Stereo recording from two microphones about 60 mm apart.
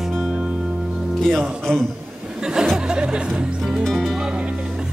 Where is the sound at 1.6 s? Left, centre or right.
Centre.